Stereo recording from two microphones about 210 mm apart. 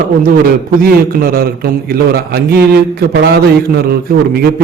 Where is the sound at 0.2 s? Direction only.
45° right (ahead or behind).